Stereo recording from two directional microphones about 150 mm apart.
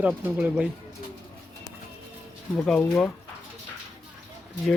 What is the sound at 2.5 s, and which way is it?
Speech, 10° left (ahead or behind).